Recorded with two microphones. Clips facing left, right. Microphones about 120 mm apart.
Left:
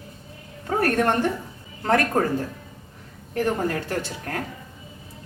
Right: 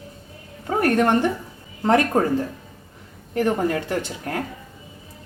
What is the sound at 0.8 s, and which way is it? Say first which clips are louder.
A woman's voice: right 3 dB; 15° right (ahead or behind).